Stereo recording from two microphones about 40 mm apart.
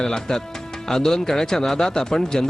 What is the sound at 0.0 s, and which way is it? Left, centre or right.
Speech, centre.